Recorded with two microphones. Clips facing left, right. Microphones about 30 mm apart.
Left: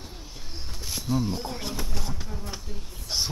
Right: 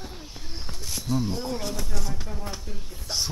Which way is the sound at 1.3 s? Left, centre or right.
Centre.